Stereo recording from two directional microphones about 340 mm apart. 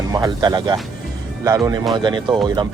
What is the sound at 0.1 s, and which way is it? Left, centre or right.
Speech, centre.